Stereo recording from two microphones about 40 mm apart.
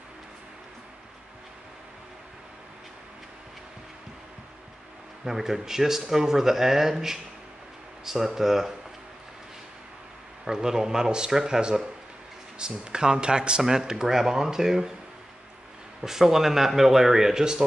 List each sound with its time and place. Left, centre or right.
5.2 s speech: centre
10.4 s speech: centre
16.0 s speech: centre